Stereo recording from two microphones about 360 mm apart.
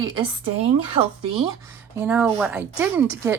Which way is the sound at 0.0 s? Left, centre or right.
Centre.